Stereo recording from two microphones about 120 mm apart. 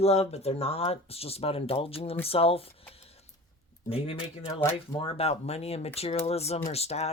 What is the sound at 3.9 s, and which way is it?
Speech, 55° left (ahead or behind).